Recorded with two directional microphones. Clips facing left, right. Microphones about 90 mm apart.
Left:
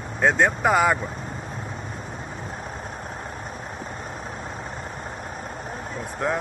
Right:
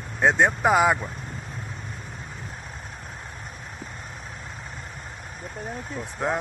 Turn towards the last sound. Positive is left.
turn(degrees=-20)  # may be behind; listen again after turning